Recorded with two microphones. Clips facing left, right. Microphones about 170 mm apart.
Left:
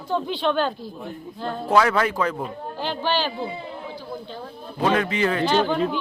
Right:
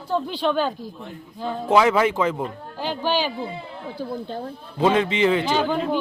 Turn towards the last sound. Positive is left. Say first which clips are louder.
# left 2 dB
turn(degrees=0)  # may be behind; listen again after turning